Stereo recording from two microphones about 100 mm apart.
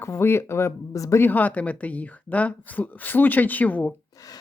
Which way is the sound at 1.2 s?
15° left (ahead or behind).